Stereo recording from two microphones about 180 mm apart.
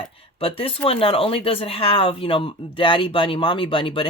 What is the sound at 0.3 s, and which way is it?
Speech, 30° left (ahead or behind).